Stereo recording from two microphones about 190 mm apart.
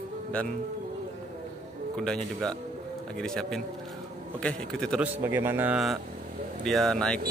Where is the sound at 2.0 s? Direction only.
5° left (ahead or behind).